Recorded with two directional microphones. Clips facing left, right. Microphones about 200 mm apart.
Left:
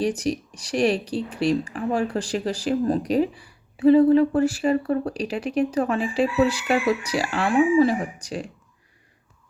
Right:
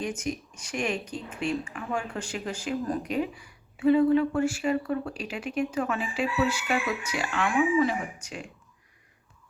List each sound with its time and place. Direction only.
0.0 s speech: 35° left (ahead or behind)